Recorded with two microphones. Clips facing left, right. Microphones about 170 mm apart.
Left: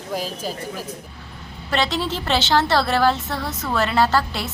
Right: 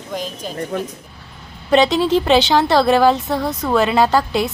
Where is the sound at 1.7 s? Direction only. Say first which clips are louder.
Right 9 dB; 15° right (ahead or behind).